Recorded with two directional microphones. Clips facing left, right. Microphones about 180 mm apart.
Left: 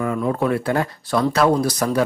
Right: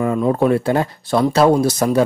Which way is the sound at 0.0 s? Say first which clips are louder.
Right 5 dB; 25° right (ahead or behind).